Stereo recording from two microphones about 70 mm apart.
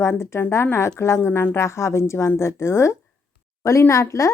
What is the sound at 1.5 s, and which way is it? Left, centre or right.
A woman's voice, left.